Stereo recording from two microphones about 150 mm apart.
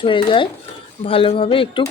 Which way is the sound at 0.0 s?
35° left (ahead or behind).